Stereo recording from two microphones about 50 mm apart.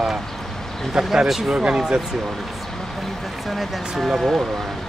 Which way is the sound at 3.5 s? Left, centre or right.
Centre.